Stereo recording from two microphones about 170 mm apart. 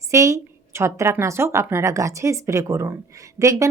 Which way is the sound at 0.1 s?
15° right (ahead or behind).